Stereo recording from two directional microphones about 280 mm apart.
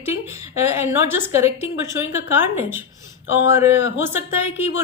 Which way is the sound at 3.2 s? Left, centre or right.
Left.